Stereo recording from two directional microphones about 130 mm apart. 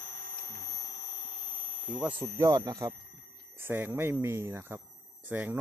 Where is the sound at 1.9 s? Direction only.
10° right (ahead or behind).